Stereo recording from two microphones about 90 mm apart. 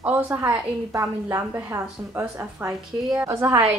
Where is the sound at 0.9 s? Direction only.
35° right (ahead or behind).